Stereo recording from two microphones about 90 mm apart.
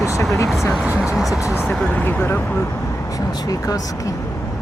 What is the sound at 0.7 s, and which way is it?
Speech, 10° right (ahead or behind).